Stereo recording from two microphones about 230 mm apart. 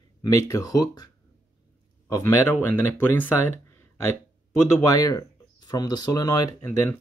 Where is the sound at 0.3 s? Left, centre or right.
Centre.